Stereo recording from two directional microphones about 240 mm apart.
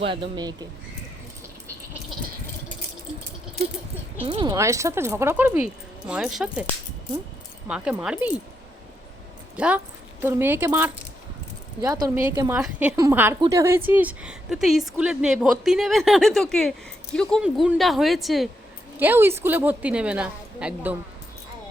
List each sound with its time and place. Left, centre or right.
0.0 s speech: right
4.3 s a woman's voice: centre
7.7 s a woman's voice: centre
9.6 s a woman's voice: centre